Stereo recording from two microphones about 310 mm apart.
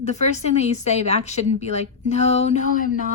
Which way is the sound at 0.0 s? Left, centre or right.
Left.